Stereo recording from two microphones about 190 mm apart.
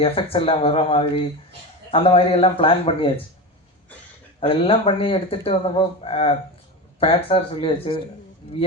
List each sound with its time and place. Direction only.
0.0 s speech: 30° left (ahead or behind)
4.4 s speech: 30° left (ahead or behind)